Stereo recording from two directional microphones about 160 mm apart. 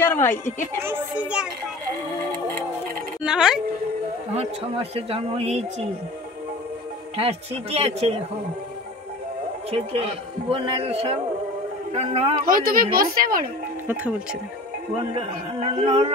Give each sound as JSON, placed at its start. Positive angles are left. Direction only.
{"t": 0.0, "sound": "a woman's voice", "side_deg": 15}
{"t": 0.8, "sound": "a child's voice", "side_deg": -10}
{"t": 3.3, "sound": "speech", "side_deg": -5}
{"t": 4.3, "sound": "a woman's voice", "side_deg": -40}
{"t": 7.2, "sound": "a woman's voice", "side_deg": -35}
{"t": 9.7, "sound": "a woman's voice", "side_deg": -35}
{"t": 12.4, "sound": "a woman's voice", "side_deg": -60}
{"t": 15.1, "sound": "a woman's voice", "side_deg": -35}